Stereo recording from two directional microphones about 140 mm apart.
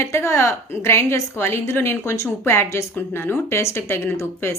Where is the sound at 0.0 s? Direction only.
20° left (ahead or behind).